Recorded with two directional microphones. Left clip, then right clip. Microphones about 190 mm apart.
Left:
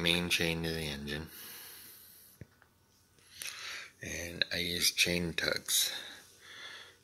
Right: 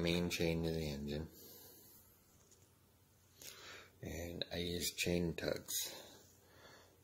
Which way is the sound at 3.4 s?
15° right (ahead or behind).